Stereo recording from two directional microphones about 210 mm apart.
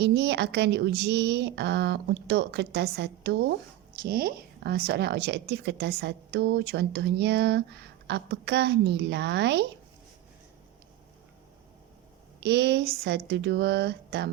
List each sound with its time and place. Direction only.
0.0 s a woman's voice: 55° right (ahead or behind)
12.4 s a woman's voice: 55° right (ahead or behind)